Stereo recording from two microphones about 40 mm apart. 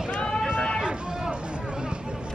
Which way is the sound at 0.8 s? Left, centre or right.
Right.